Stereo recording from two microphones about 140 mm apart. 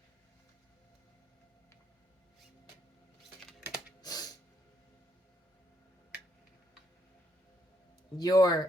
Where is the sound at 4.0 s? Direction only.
25° left (ahead or behind).